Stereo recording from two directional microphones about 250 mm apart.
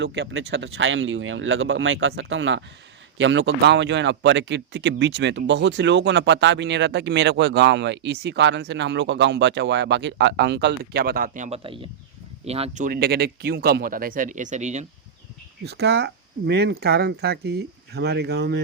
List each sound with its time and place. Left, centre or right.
0.0 s a man's voice: right
15.6 s speech: right